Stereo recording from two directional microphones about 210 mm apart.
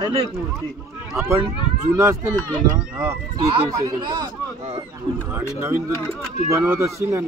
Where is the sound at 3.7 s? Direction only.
20° right (ahead or behind).